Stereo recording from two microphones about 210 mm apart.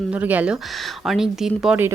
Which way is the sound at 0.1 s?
5° right (ahead or behind).